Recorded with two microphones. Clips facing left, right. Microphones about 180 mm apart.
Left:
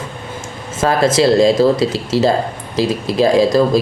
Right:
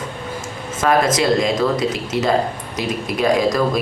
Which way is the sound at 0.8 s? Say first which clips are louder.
Left 3 dB; 30° left (ahead or behind).